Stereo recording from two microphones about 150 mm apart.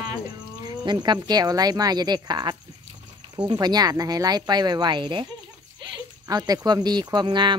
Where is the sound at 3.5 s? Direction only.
25° right (ahead or behind).